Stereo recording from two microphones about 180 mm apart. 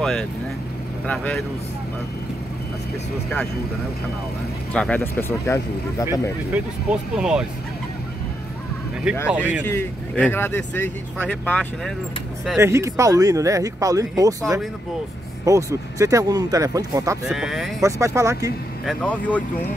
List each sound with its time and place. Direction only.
0.0 s speech: 5° left (ahead or behind)
4.7 s speech: 10° left (ahead or behind)
6.5 s speech: 5° right (ahead or behind)
9.3 s speech: 10° right (ahead or behind)
9.7 s speech: 10° left (ahead or behind)
12.5 s speech: 15° right (ahead or behind)
15.4 s speech: 15° right (ahead or behind)
17.3 s speech: 5° right (ahead or behind)
17.8 s speech: 15° right (ahead or behind)
18.9 s speech: 10° left (ahead or behind)